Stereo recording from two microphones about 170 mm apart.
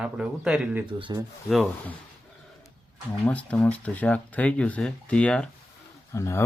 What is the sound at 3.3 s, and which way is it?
Speech, 10° left (ahead or behind).